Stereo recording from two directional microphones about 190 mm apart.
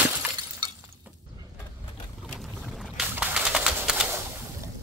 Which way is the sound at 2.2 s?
Centre (ahead or behind).